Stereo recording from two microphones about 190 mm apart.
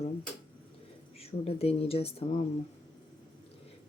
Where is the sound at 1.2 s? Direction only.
30° left (ahead or behind).